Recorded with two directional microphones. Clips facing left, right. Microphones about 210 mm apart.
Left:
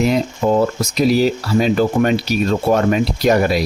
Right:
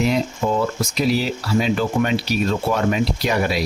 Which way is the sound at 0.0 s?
45° left (ahead or behind).